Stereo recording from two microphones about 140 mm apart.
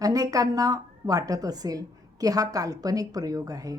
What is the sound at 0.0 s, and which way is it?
A woman's voice, 25° right (ahead or behind).